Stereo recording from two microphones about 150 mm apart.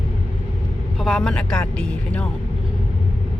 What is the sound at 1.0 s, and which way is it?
Speech, centre (ahead or behind).